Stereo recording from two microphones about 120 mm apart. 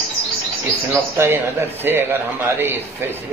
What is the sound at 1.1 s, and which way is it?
A man's voice, 20° right (ahead or behind).